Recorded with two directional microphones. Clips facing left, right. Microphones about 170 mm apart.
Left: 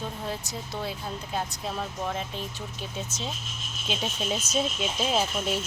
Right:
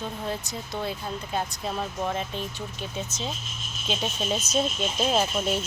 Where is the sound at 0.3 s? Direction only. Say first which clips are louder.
Right 2 dB; 5° left (ahead or behind).